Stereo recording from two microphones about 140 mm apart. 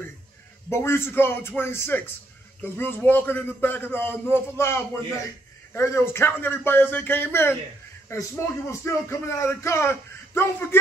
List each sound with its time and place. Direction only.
0.7 s a man's voice: 20° left (ahead or behind)